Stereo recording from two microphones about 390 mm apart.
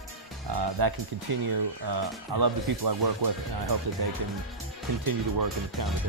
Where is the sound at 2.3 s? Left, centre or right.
Right.